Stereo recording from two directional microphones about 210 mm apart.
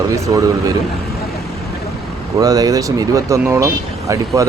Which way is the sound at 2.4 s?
15° right (ahead or behind).